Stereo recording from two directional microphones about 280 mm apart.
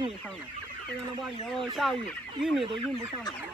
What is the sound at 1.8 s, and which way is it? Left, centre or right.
Speech, centre.